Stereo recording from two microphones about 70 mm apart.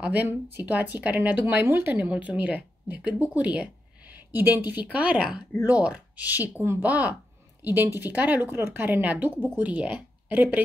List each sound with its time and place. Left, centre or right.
0.0 s a woman's voice: right
2.0 s speech: centre
4.3 s speech: right
4.7 s speech: centre
8.5 s a woman's voice: right
8.8 s speech: right